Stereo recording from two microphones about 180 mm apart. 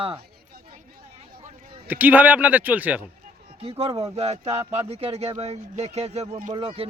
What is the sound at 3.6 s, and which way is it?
Speech, 30° right (ahead or behind).